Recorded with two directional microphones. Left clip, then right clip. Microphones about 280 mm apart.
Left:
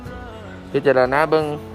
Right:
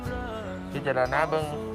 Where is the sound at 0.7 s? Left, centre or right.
Centre.